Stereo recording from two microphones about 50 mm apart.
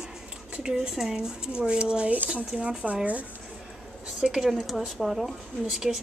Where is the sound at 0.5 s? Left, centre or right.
Right.